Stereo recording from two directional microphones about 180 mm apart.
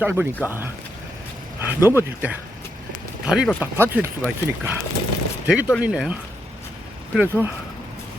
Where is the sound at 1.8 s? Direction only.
10° right (ahead or behind).